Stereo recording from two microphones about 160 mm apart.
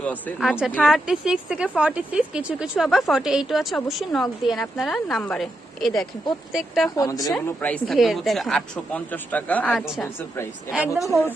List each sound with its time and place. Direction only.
0.3 s a woman's voice: centre (ahead or behind)
6.9 s a woman's voice: 20° left (ahead or behind)
7.3 s speech: 10° left (ahead or behind)
7.9 s speech: centre (ahead or behind)
9.7 s a woman's voice: centre (ahead or behind)
10.2 s speech: 15° left (ahead or behind)
10.9 s a woman's voice: centre (ahead or behind)